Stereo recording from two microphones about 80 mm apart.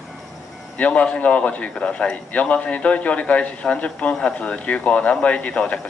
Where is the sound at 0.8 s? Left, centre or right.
Centre.